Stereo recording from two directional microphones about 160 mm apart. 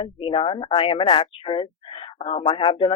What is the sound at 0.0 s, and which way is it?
Speech, 35° left (ahead or behind).